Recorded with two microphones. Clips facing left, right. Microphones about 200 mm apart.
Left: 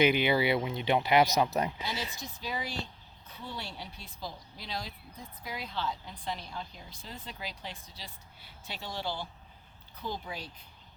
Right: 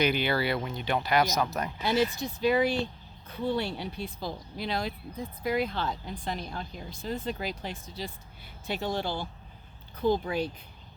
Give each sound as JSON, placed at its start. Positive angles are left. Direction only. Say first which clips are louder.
{"t": 0.1, "sound": "speech", "louder": "left 1 dB", "side_deg": 15}
{"t": 1.8, "sound": "speech", "louder": "right 11 dB", "side_deg": -60}